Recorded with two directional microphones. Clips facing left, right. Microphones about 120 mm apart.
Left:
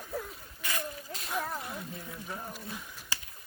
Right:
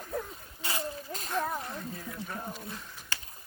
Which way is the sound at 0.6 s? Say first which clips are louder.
Right 2 dB; 25° right (ahead or behind).